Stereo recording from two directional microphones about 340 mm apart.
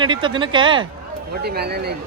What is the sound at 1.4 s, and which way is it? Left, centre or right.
Speech, right.